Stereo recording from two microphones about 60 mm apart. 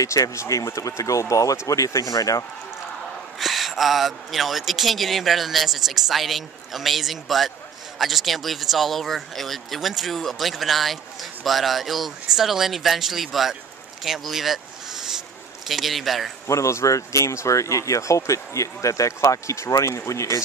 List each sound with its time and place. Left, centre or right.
0.0 s speech: left
3.3 s a man's voice: centre
15.7 s a man's voice: centre
16.4 s speech: left